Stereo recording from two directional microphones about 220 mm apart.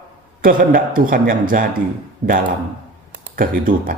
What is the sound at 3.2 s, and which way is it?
Speech, 40° right (ahead or behind).